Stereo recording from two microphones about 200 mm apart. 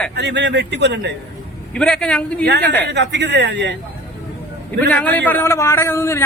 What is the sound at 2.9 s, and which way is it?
Speech, 60° right (ahead or behind).